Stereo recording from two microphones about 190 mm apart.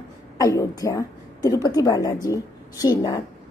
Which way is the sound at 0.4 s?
15° left (ahead or behind).